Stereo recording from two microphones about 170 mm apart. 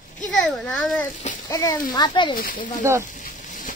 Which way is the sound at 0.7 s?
5° left (ahead or behind).